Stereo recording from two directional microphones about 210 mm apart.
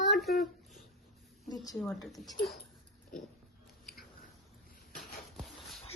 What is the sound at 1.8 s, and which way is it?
Speech, centre (ahead or behind).